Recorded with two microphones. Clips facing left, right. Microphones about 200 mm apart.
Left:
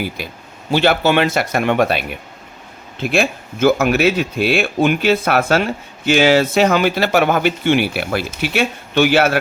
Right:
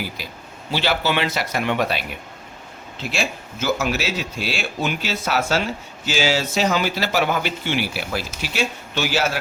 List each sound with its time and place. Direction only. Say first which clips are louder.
0.7 s speech: left 7 dB; 55° left (ahead or behind)